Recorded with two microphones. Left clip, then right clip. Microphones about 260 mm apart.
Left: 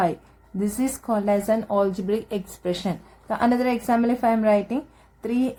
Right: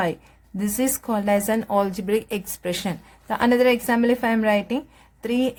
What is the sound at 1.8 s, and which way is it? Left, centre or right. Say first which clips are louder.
Speech: right 1 dB; right.